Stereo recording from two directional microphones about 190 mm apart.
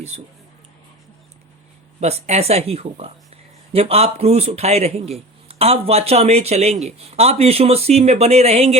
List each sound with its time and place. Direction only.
0.1 s speech: 35° right (ahead or behind)
2.0 s speech: 35° right (ahead or behind)